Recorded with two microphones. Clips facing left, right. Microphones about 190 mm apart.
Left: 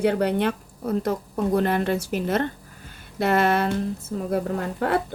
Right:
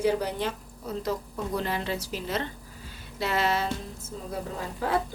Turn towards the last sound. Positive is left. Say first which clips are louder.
# left 5 dB
turn(degrees=60)  # may be behind; listen again after turning